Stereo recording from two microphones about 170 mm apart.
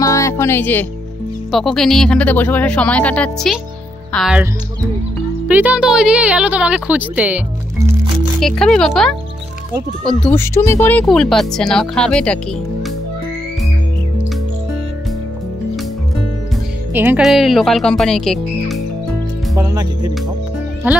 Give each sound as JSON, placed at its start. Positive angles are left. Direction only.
{"t": 0.0, "sound": "music", "side_deg": 20}
{"t": 1.5, "sound": "speech", "side_deg": 0}
{"t": 5.5, "sound": "a woman's voice", "side_deg": -10}
{"t": 8.4, "sound": "speech", "side_deg": 5}
{"t": 10.3, "sound": "speech", "side_deg": 15}
{"t": 16.9, "sound": "speech", "side_deg": -10}
{"t": 17.2, "sound": "speech", "side_deg": 0}
{"t": 19.5, "sound": "speech", "side_deg": -20}
{"t": 20.9, "sound": "a woman's voice", "side_deg": -10}